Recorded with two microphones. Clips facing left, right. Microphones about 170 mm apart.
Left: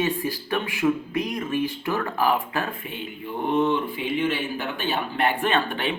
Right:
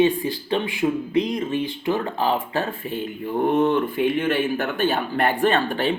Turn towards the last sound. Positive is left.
turn(degrees=-40)  # may be behind; listen again after turning